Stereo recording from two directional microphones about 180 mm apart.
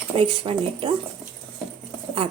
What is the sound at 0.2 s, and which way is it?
Speech, 30° right (ahead or behind).